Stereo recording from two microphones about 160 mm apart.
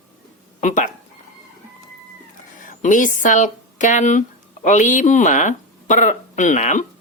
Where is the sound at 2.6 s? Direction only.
55° left (ahead or behind).